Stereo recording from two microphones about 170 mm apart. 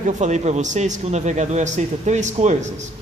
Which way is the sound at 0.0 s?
45° right (ahead or behind).